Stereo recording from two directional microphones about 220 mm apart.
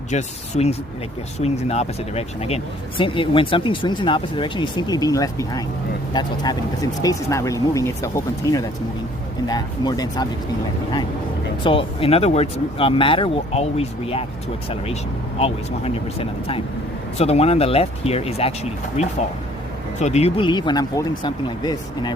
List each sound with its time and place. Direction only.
0.1 s speech: 30° left (ahead or behind)
11.6 s speech: 25° left (ahead or behind)
15.4 s speech: 25° left (ahead or behind)